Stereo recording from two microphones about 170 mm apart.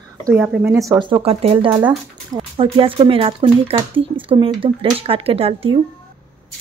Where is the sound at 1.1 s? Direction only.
35° right (ahead or behind).